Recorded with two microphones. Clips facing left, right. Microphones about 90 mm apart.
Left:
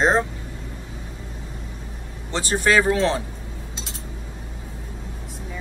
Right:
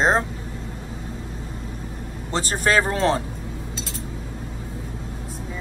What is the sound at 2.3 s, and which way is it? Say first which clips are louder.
Speech: left 1 dB; 40° right (ahead or behind).